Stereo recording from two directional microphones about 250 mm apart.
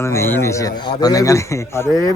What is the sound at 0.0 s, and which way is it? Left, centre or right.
A man's voice, centre.